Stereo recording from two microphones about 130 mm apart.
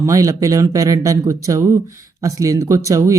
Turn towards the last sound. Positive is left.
turn(degrees=-25)  # may be behind; listen again after turning